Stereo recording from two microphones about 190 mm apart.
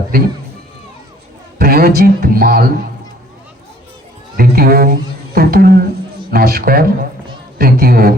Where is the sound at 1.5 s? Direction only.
50° right (ahead or behind).